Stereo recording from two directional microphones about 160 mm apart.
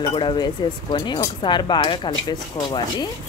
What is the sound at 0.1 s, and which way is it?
Speech, 30° left (ahead or behind).